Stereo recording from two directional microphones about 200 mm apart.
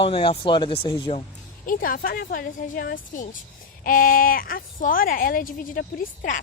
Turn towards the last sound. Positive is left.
turn(degrees=45)  # may be behind; listen again after turning